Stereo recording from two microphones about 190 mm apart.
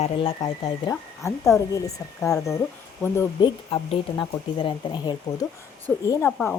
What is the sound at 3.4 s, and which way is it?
Speech, 25° left (ahead or behind).